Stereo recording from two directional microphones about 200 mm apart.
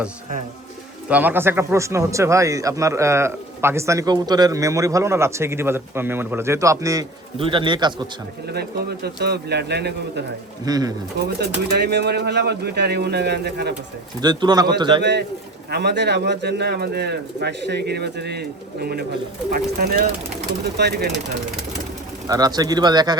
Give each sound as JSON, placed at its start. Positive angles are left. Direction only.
{"t": 1.0, "sound": "speech", "side_deg": -10}
{"t": 8.5, "sound": "speech", "side_deg": -55}
{"t": 10.7, "sound": "speech", "side_deg": -20}
{"t": 11.2, "sound": "speech", "side_deg": -55}
{"t": 14.2, "sound": "speech", "side_deg": -20}
{"t": 15.7, "sound": "speech", "side_deg": -55}
{"t": 22.3, "sound": "speech", "side_deg": -20}